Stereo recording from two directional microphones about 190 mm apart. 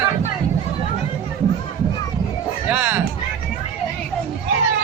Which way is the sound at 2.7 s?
10° right (ahead or behind).